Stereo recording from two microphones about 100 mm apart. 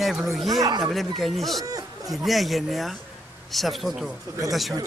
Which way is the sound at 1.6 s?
35° right (ahead or behind).